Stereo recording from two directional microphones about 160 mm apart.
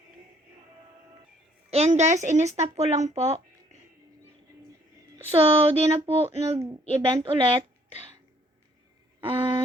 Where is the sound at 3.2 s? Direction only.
40° right (ahead or behind).